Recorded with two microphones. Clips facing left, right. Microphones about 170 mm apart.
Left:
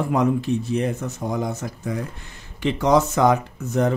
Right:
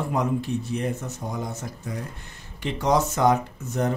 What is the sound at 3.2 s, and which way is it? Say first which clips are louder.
Speech: left 1 dB; 90° left.